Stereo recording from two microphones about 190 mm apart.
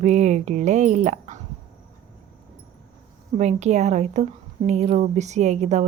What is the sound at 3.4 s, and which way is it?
A woman's voice, 35° right (ahead or behind).